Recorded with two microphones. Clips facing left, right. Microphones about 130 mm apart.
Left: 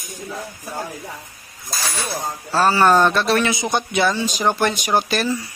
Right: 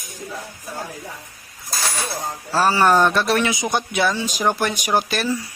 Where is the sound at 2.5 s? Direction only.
10° right (ahead or behind).